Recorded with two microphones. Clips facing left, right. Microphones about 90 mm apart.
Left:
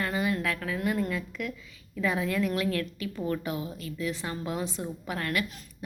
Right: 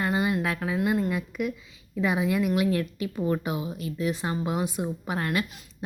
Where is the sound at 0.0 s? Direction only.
20° right (ahead or behind).